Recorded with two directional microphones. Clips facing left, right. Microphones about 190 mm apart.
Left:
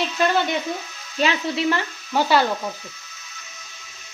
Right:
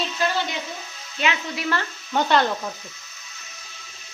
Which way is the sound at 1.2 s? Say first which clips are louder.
Left 4 dB; 35° left (ahead or behind).